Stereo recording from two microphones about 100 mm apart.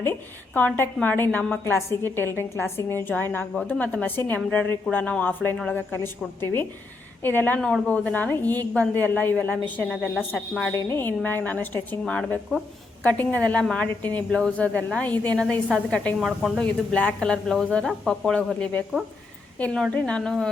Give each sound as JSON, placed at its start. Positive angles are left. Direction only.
{"t": 0.0, "sound": "a woman's voice", "side_deg": 20}
{"t": 7.6, "sound": "a woman's voice", "side_deg": 10}
{"t": 10.3, "sound": "speech", "side_deg": 5}
{"t": 10.7, "sound": "a woman's voice", "side_deg": 25}
{"t": 16.2, "sound": "speech", "side_deg": 0}
{"t": 16.9, "sound": "a woman's voice", "side_deg": 10}